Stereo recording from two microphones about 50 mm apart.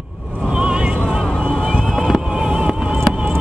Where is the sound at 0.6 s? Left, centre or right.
Right.